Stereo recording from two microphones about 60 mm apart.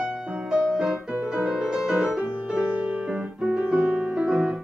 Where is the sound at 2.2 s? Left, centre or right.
Centre.